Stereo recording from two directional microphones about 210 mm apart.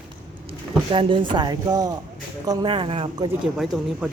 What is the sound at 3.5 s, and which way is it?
Speech, centre (ahead or behind).